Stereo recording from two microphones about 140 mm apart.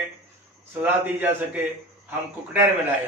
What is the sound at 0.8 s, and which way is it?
Speech, 10° right (ahead or behind).